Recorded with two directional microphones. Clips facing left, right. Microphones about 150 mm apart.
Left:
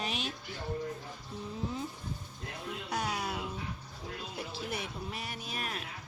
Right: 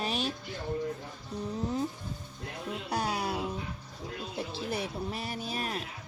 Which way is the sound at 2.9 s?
30° right (ahead or behind).